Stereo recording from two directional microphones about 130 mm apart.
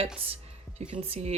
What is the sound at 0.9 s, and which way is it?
Speech, 45° right (ahead or behind).